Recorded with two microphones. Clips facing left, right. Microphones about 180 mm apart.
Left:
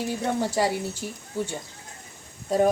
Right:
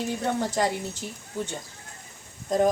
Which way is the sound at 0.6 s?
10° left (ahead or behind).